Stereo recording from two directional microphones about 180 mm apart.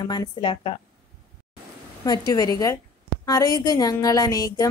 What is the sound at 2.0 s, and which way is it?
A woman's voice, 20° left (ahead or behind).